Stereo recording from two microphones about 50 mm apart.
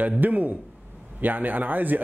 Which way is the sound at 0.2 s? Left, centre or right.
Right.